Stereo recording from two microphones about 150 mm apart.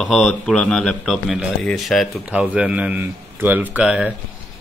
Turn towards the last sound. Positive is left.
turn(degrees=-10)  # may be behind; listen again after turning